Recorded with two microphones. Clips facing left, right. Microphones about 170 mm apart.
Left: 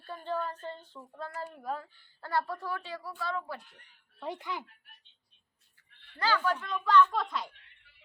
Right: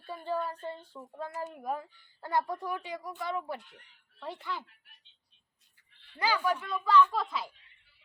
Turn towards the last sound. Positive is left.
turn(degrees=0)  # may be behind; listen again after turning